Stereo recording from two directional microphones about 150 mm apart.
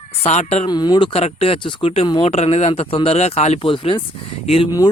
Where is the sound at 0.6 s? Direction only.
30° left (ahead or behind).